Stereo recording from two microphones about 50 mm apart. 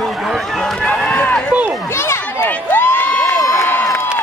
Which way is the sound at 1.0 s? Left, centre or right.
Left.